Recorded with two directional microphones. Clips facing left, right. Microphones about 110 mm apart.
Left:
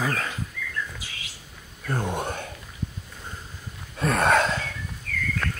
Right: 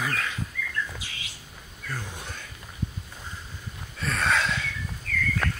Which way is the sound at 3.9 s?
55° left (ahead or behind).